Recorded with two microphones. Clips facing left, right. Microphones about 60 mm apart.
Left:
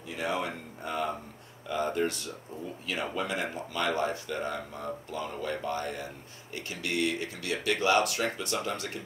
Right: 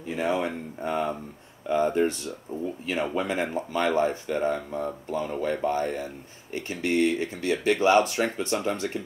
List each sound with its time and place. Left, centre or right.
0.1 s speech: right
3.2 s speech: right